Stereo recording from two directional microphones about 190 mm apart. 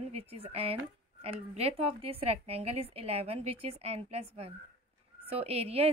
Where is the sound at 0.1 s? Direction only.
30° right (ahead or behind).